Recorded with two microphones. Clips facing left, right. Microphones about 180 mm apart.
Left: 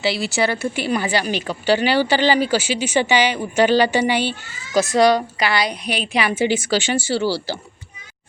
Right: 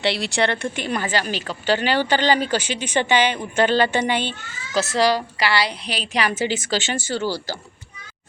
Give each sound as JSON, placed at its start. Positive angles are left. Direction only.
{"t": 0.0, "sound": "a woman's voice", "side_deg": 0}